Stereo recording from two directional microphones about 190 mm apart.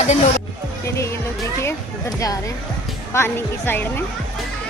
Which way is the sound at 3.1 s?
10° left (ahead or behind).